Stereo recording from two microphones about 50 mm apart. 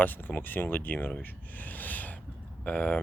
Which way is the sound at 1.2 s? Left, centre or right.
Left.